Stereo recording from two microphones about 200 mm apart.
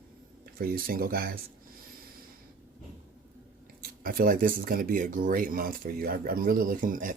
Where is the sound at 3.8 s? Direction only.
45° right (ahead or behind).